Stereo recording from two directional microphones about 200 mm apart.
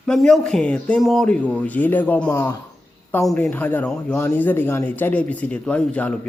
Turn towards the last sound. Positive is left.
turn(degrees=5)  # may be behind; listen again after turning